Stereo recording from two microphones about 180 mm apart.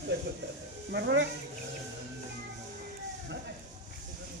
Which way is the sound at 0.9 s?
75° right (ahead or behind).